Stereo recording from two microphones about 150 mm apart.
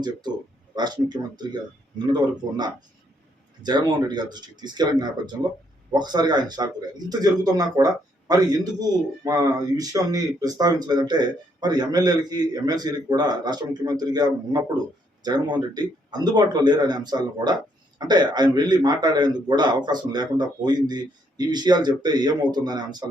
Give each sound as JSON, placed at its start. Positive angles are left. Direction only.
{"t": 0.0, "sound": "a man's voice", "side_deg": -30}